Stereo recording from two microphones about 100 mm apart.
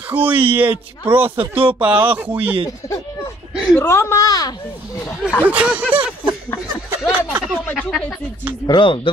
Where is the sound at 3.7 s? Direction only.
25° left (ahead or behind).